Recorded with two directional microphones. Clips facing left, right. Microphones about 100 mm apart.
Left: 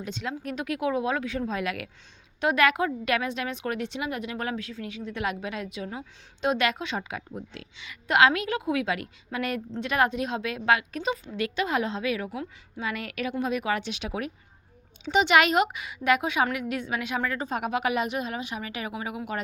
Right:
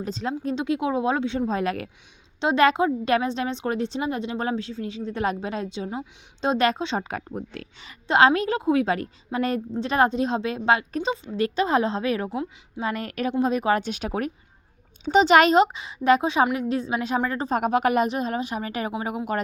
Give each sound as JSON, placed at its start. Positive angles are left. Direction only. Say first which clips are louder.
{"t": 0.0, "sound": "a woman's voice", "louder": "right 5 dB", "side_deg": -35}
{"t": 7.1, "sound": "speech", "louder": "right 5 dB", "side_deg": -50}
{"t": 8.0, "sound": "a woman's voice", "louder": "right 3 dB", "side_deg": -30}
{"t": 12.8, "sound": "a woman's voice", "louder": "right 4 dB", "side_deg": -40}